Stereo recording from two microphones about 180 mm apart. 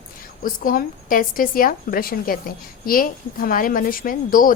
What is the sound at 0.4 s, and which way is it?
A woman's voice, 50° left (ahead or behind).